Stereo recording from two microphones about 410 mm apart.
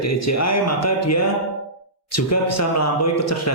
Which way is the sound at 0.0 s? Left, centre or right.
Left.